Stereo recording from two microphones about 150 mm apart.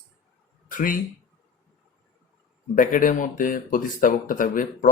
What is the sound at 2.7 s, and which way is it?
Speech, 65° left (ahead or behind).